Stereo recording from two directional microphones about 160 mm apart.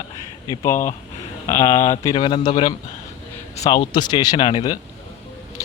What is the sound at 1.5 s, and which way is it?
A man's voice, 20° left (ahead or behind).